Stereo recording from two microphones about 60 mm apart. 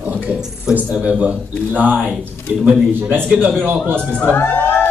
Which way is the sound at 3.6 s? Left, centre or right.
Right.